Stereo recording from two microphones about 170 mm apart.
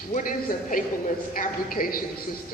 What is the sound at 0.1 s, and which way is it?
A woman's voice, 55° left (ahead or behind).